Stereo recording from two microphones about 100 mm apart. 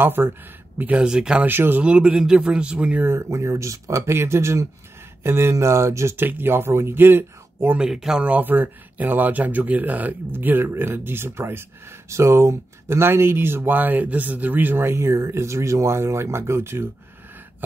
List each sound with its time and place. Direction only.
0.0 s speech: 20° right (ahead or behind)
1.5 s speech: 20° right (ahead or behind)
3.1 s speech: 30° right (ahead or behind)
7.7 s speech: 5° right (ahead or behind); by 16.9 s 25° right (ahead or behind)